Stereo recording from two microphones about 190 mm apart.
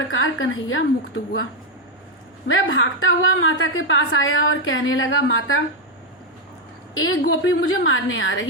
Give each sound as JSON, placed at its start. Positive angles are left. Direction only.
{"t": 0.1, "sound": "a woman's voice", "side_deg": 90}
{"t": 2.5, "sound": "a woman's voice", "side_deg": 90}
{"t": 6.9, "sound": "a woman's voice", "side_deg": 90}